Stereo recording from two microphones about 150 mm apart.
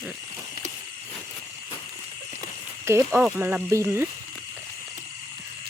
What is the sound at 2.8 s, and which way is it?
Speech, 20° right (ahead or behind).